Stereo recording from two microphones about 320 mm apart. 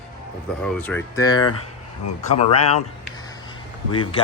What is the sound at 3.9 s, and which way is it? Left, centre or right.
Speech, centre.